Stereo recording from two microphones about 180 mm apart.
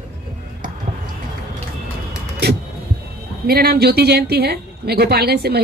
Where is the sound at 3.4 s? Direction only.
60° right (ahead or behind).